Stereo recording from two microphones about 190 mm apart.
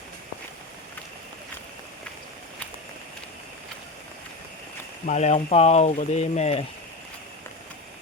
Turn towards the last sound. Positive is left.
turn(degrees=35)  # may be behind; listen again after turning